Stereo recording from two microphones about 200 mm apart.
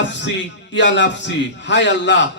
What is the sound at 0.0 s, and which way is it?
A man's voice, 60° left (ahead or behind).